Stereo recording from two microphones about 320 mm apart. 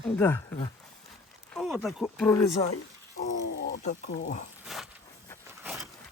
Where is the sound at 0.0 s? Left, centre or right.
Centre.